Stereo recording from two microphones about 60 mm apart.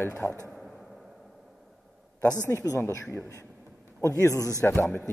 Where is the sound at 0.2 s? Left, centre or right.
Centre.